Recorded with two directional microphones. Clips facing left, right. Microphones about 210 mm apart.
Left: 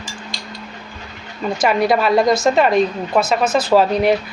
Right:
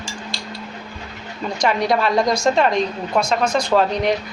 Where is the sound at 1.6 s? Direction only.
5° left (ahead or behind).